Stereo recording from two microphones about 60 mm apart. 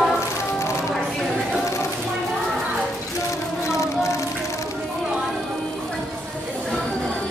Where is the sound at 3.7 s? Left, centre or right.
Left.